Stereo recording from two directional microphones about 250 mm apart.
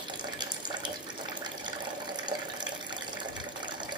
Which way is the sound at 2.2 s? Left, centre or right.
Centre.